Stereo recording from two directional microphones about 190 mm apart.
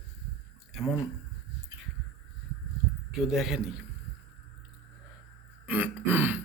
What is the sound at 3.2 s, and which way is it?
Speech, centre (ahead or behind).